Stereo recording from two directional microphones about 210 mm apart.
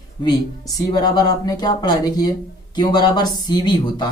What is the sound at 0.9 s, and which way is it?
Speech, 20° left (ahead or behind).